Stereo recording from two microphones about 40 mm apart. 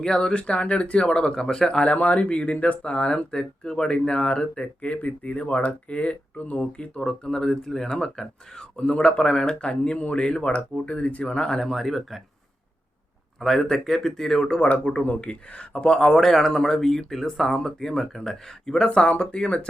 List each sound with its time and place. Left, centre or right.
0.0 s speech: centre
1.8 s speech: left
6.6 s speech: left
7.3 s speech: centre; by 11.2 s left
11.2 s speech: left; by 12.2 s centre
13.4 s speech: centre
14.6 s speech: left; by 18.9 s centre
18.9 s speech: left